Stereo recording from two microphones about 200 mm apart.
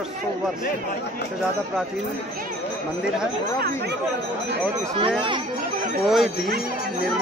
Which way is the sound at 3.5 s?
50° right (ahead or behind).